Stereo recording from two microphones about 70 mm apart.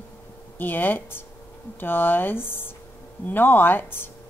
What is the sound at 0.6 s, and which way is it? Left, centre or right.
A woman's voice, left.